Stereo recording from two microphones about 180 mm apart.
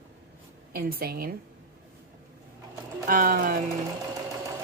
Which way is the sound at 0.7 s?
55° right (ahead or behind).